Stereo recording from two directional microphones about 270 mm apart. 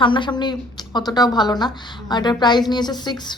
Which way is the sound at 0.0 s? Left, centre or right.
Centre.